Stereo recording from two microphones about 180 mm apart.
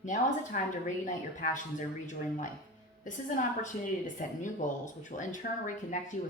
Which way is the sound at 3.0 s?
45° left (ahead or behind).